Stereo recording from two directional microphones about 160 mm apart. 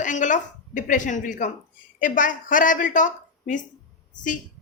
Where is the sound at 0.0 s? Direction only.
50° left (ahead or behind).